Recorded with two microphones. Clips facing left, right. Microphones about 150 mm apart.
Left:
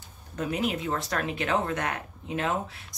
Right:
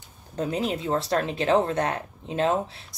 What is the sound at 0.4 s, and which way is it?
Speech, 30° right (ahead or behind).